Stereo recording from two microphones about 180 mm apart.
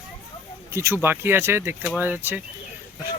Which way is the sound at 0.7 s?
15° right (ahead or behind).